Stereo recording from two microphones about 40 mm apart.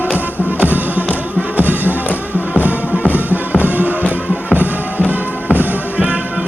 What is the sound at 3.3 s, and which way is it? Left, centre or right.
Music, right.